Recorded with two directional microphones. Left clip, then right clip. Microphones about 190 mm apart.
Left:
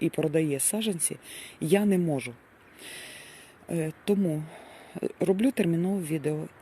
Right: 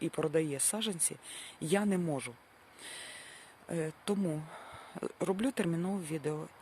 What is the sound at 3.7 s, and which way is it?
Speech, 5° right (ahead or behind).